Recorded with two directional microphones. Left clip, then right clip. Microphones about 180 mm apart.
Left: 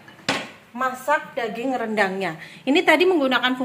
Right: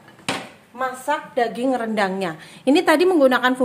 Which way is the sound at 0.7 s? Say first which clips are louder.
Left 1 dB; 75° right (ahead or behind).